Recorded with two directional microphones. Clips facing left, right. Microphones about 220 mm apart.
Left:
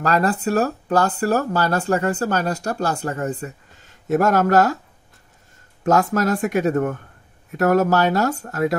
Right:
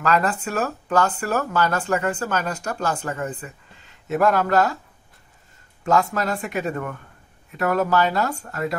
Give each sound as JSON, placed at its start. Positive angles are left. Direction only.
{"t": 0.0, "sound": "speech", "side_deg": 35}
{"t": 6.1, "sound": "speech", "side_deg": 45}